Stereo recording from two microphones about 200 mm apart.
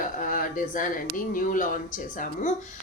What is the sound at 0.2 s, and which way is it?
Speech, 40° left (ahead or behind).